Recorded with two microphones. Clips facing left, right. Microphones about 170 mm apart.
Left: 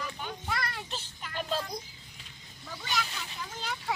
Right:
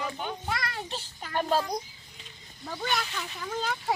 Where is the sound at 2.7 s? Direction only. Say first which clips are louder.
Right 4 dB; 55° right (ahead or behind).